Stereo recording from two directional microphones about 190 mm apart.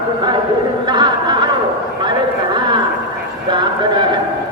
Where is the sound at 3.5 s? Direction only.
25° right (ahead or behind).